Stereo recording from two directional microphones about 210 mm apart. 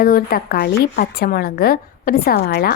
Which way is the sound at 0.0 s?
45° left (ahead or behind).